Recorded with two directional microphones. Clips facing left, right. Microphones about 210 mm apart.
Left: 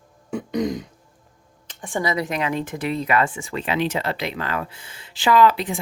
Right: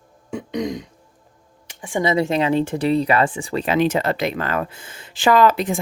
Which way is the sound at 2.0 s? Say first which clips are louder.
Right 5 dB; 25° right (ahead or behind).